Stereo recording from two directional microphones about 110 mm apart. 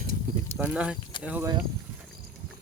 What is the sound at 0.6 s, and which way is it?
Speech, 10° right (ahead or behind).